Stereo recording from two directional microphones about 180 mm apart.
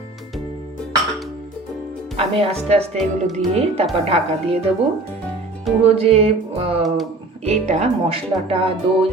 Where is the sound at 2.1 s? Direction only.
35° right (ahead or behind).